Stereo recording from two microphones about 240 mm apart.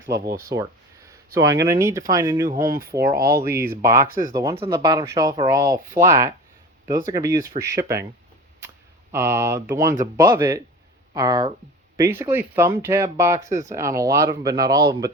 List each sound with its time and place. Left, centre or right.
0.3 s speech: centre
2.5 s speech: right
3.5 s speech: centre
4.0 s speech: right
4.4 s speech: centre
9.1 s speech: centre